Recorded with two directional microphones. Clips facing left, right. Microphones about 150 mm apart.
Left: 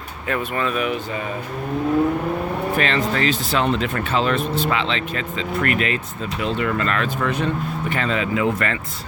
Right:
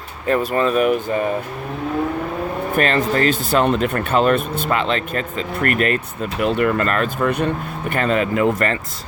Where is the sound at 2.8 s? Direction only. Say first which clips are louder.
Right 5 dB; 45° right (ahead or behind).